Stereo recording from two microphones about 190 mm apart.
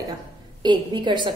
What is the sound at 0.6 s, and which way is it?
Speech, 25° right (ahead or behind).